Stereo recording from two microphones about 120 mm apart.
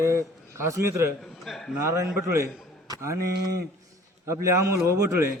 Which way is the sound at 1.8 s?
20° right (ahead or behind).